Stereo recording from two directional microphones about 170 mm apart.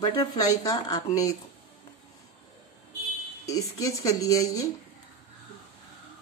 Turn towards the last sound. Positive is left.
turn(degrees=20)  # may be behind; listen again after turning